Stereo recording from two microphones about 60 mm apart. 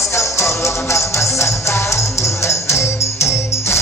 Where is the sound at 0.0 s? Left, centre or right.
Left.